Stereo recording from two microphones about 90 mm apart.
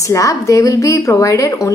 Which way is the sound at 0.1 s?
35° left (ahead or behind).